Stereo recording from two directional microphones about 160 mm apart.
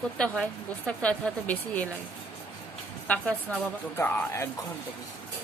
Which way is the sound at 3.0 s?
10° left (ahead or behind).